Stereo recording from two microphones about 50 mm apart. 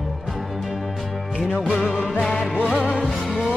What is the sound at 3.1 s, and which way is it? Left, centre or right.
Music, centre.